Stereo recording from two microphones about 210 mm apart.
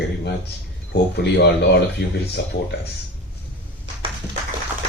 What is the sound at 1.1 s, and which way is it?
Speech, 50° left (ahead or behind).